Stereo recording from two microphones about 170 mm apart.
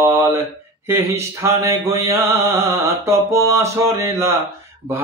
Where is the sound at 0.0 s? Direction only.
15° right (ahead or behind).